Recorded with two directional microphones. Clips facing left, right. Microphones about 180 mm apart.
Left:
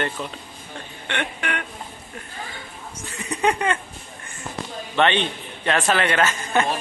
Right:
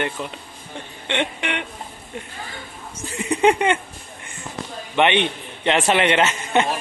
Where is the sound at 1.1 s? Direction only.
20° right (ahead or behind).